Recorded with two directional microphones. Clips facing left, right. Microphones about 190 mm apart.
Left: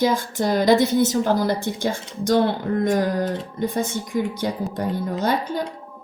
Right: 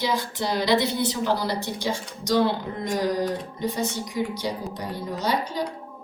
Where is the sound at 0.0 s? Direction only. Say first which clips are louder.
Left 6 dB; 50° left (ahead or behind).